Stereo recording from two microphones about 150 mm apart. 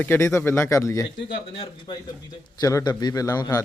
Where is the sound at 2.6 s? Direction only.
25° left (ahead or behind).